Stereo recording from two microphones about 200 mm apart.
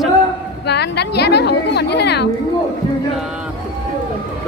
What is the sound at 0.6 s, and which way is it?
A woman's voice, 55° left (ahead or behind).